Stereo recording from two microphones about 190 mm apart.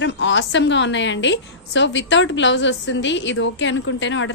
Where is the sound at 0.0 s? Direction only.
70° left (ahead or behind).